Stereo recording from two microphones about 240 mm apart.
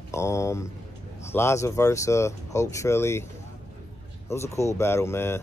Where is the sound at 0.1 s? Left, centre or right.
Centre.